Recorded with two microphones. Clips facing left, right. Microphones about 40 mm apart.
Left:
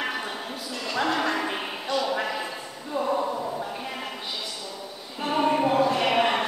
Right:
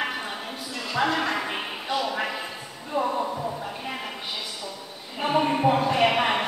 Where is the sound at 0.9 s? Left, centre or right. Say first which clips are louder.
Right 1 dB; centre.